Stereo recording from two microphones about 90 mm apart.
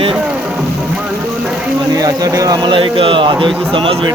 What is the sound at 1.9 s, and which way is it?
Speech, 45° right (ahead or behind).